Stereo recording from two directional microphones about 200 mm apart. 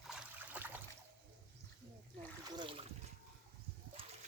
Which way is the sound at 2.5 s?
25° right (ahead or behind).